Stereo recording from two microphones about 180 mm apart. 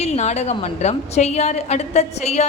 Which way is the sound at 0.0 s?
35° left (ahead or behind).